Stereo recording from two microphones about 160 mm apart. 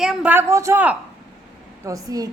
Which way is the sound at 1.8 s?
20° right (ahead or behind).